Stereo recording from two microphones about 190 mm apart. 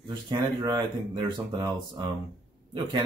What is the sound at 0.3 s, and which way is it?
Speech, 20° right (ahead or behind).